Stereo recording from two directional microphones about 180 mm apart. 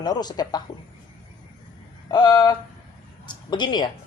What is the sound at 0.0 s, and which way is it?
Speech, 25° left (ahead or behind).